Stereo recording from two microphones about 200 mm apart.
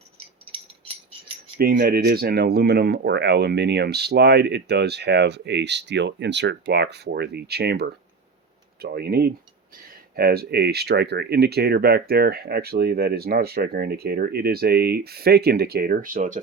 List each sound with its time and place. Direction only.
1.5 s speech: 45° right (ahead or behind)